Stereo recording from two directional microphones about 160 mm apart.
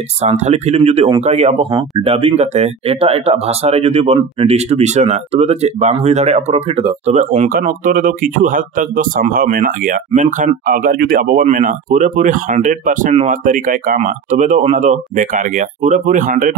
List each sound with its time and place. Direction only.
0.2 s speech: 40° right (ahead or behind)
7.2 s speech: 50° right (ahead or behind)
11.4 s speech: 50° right (ahead or behind)